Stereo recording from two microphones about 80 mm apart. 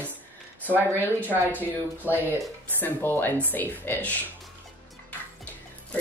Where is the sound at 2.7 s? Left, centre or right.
Left.